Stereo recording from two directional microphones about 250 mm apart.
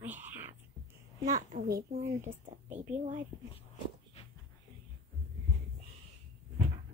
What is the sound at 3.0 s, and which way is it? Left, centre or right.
Speech, right.